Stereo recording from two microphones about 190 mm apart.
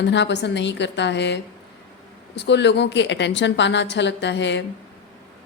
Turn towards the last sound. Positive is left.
turn(degrees=70)  # may be behind; listen again after turning